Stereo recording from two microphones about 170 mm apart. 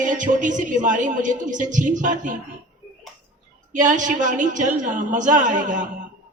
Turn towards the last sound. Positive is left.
turn(degrees=-50)  # may be behind; listen again after turning